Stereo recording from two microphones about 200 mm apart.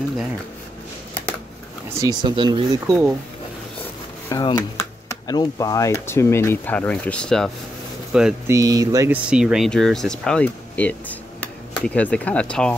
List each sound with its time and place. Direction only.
2.0 s speech: 20° right (ahead or behind)
4.3 s speech: 20° left (ahead or behind); by 8.4 s 5° right (ahead or behind)
8.5 s speech: 15° right (ahead or behind)
9.3 s speech: 5° right (ahead or behind)